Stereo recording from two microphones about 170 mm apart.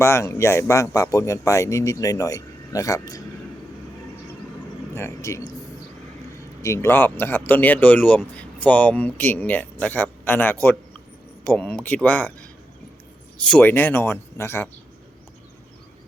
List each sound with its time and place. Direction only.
0.0 s speech: 15° left (ahead or behind)
4.9 s speech: 15° left (ahead or behind)
6.6 s speech: 15° left (ahead or behind)